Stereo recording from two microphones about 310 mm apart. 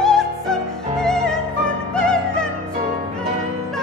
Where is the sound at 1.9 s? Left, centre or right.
Centre.